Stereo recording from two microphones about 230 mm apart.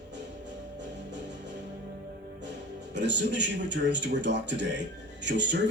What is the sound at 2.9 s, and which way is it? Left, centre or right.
Speech, right.